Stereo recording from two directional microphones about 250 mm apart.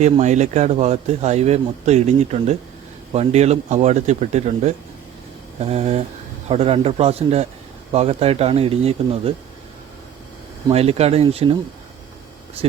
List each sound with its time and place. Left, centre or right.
0.0 s speech: right
10.7 s speech: right